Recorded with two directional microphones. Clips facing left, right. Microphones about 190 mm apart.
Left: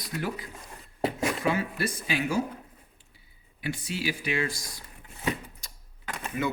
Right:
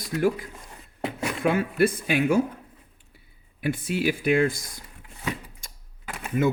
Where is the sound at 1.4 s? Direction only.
55° right (ahead or behind).